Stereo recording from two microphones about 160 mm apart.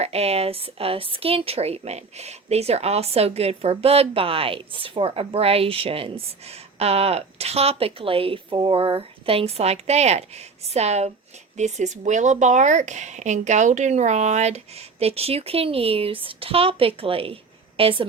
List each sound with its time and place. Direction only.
0.0 s a woman's voice: 40° right (ahead or behind)